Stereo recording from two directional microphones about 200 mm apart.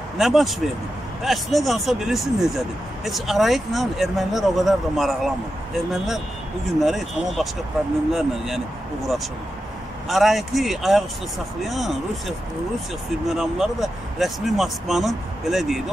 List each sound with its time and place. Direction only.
0.2 s speech: centre (ahead or behind)
10.0 s speech: centre (ahead or behind)